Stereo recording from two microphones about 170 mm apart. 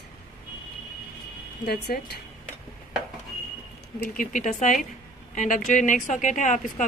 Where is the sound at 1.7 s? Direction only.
70° left (ahead or behind).